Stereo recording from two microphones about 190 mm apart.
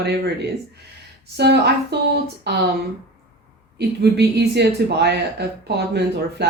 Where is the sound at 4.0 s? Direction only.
60° right (ahead or behind).